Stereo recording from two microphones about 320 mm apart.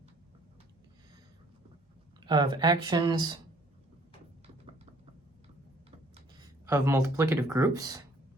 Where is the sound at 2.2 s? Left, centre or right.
Centre.